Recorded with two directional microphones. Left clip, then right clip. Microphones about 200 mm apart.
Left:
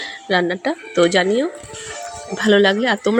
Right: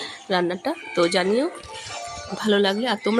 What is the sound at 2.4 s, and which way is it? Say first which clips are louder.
Speech: left 6 dB; 10° left (ahead or behind).